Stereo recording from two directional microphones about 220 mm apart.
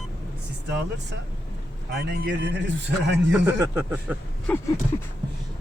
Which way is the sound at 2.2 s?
50° right (ahead or behind).